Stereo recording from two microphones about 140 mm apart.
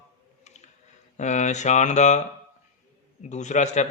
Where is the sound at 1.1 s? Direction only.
60° left (ahead or behind).